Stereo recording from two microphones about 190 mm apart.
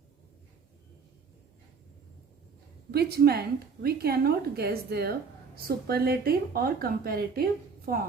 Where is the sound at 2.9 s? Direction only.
55° right (ahead or behind).